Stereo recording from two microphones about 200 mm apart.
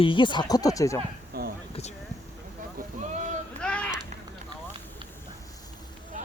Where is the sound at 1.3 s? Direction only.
50° right (ahead or behind).